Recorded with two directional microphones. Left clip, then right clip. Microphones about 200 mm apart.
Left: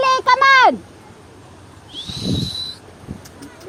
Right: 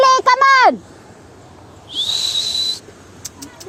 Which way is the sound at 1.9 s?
40° right (ahead or behind).